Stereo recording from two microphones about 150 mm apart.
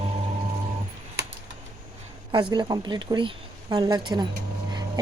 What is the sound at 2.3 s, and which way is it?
Speech, 30° right (ahead or behind).